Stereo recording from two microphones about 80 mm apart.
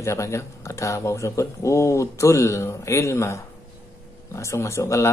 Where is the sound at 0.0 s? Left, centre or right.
Left.